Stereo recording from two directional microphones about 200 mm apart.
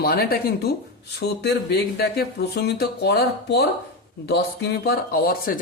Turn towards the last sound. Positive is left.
turn(degrees=45)  # may be behind; listen again after turning